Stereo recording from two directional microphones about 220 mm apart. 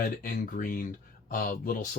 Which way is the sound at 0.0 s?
40° left (ahead or behind).